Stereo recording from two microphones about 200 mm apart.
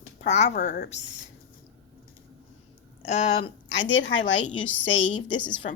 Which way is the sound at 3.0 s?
35° left (ahead or behind).